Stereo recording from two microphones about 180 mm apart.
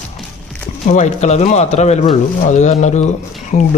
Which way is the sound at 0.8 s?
40° left (ahead or behind).